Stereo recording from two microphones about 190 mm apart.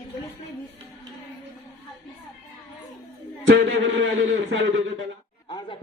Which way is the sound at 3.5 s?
75° right (ahead or behind).